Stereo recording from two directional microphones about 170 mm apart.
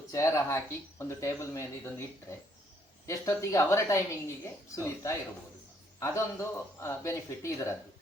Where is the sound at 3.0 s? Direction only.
15° left (ahead or behind).